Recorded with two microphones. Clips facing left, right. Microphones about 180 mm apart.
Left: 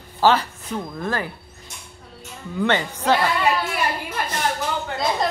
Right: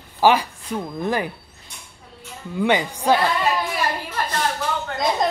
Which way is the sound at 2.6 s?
10° right (ahead or behind).